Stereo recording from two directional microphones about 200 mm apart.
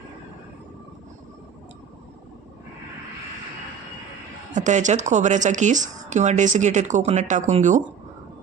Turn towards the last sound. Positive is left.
turn(degrees=-35)  # may be behind; listen again after turning